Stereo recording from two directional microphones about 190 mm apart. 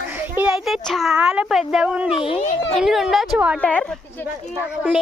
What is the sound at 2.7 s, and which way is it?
Speech, centre (ahead or behind).